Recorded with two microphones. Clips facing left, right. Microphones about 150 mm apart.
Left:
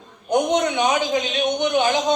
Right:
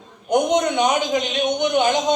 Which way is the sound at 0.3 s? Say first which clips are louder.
Right 1 dB; 20° right (ahead or behind).